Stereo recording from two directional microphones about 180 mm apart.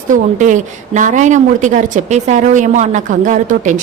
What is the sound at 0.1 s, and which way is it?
A woman's voice, 45° right (ahead or behind).